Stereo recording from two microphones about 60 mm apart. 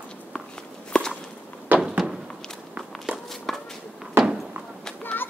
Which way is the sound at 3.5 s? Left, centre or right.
Centre.